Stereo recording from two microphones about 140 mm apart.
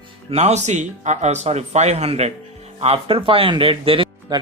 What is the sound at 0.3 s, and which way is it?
Speech, 50° right (ahead or behind).